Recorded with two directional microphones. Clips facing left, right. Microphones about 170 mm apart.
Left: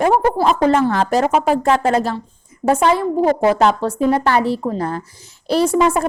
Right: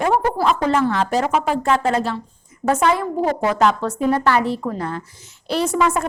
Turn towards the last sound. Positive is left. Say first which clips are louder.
# left 4 dB
turn(degrees=30)  # may be behind; listen again after turning